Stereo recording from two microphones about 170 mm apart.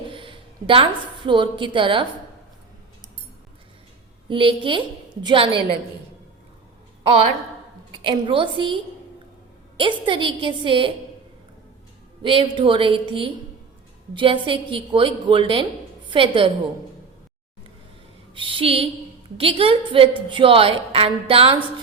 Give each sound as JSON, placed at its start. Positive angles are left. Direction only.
{"t": 0.1, "sound": "a woman's voice", "side_deg": -30}
{"t": 4.3, "sound": "a woman's voice", "side_deg": -30}
{"t": 7.9, "sound": "a woman's voice", "side_deg": -30}
{"t": 12.2, "sound": "a woman's voice", "side_deg": -30}
{"t": 18.3, "sound": "a woman's voice", "side_deg": -30}